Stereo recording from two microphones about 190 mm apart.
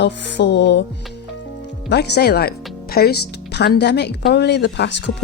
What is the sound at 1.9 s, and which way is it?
Speech, 60° left (ahead or behind).